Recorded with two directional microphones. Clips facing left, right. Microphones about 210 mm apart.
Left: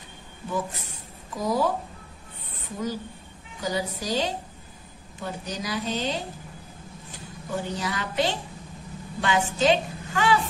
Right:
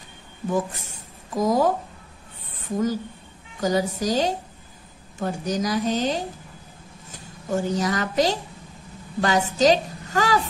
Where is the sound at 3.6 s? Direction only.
45° right (ahead or behind).